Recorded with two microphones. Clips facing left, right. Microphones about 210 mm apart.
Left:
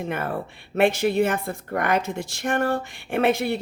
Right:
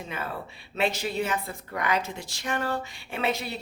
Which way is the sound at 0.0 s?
55° left (ahead or behind).